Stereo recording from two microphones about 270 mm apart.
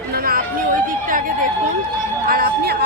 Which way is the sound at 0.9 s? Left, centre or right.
Right.